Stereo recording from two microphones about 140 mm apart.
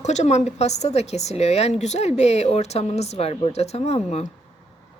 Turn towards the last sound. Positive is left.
turn(degrees=50)  # may be behind; listen again after turning